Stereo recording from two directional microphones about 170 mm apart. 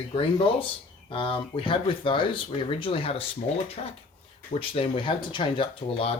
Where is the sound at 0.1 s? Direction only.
35° left (ahead or behind).